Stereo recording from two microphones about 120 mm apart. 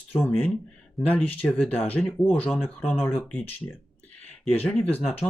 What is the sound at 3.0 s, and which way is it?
Speech, 15° left (ahead or behind).